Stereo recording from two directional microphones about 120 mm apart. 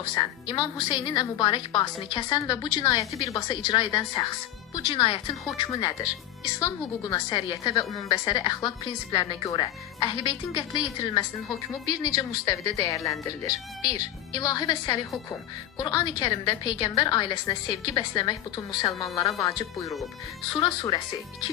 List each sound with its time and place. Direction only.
0.1 s a woman's voice: 35° left (ahead or behind)
3.3 s a woman's voice: 35° left (ahead or behind)
20.5 s a woman's voice: 40° left (ahead or behind)